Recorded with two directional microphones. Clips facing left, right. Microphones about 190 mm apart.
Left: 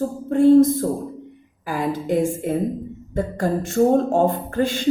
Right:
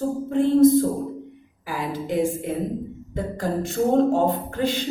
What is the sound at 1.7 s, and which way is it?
Speech, 45° left (ahead or behind).